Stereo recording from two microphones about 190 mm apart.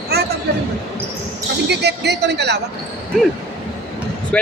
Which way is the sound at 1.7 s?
60° right (ahead or behind).